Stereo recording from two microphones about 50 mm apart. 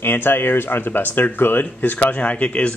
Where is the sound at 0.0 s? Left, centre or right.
Left.